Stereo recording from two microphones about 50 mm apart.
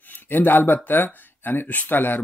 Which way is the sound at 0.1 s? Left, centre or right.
Left.